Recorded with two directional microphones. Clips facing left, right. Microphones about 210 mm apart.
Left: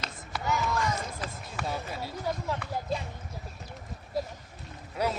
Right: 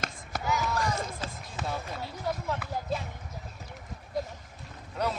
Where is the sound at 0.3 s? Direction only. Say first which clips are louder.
Even; 45° right (ahead or behind).